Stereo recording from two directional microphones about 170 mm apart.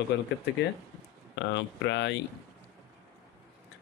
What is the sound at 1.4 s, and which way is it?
Speech, 90° left.